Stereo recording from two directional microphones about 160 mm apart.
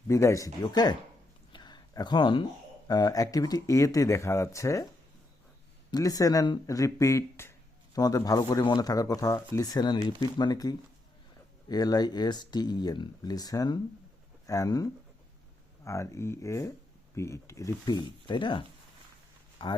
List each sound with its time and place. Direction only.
0.1 s speech: 20° left (ahead or behind)
5.9 s speech: 20° left (ahead or behind)